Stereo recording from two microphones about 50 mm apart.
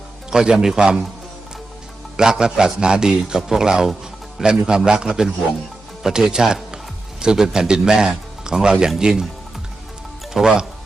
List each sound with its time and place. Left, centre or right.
0.3 s a man's voice: centre
2.1 s a man's voice: centre
10.3 s a man's voice: centre